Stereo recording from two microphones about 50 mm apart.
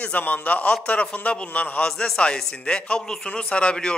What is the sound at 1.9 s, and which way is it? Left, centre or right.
A man's voice, centre.